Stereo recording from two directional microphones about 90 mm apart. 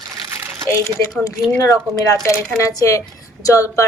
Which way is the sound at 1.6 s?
35° left (ahead or behind).